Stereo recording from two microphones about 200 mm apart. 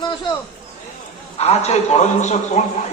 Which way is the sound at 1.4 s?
30° left (ahead or behind).